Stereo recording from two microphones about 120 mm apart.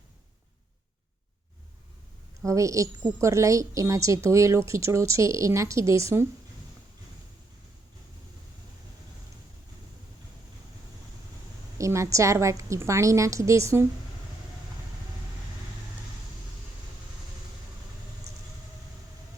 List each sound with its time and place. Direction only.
2.4 s a woman's voice: 25° right (ahead or behind)
11.8 s a woman's voice: 25° right (ahead or behind)